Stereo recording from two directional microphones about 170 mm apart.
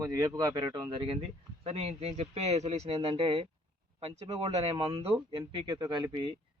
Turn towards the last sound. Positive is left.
turn(degrees=-30)  # may be behind; listen again after turning